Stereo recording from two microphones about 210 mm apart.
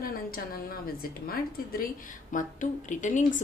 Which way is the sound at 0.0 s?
45° left (ahead or behind).